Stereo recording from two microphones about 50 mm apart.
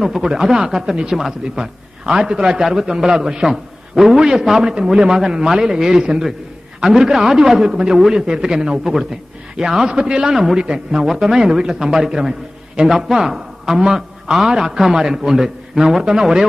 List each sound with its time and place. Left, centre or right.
0.0 s a man's voice: centre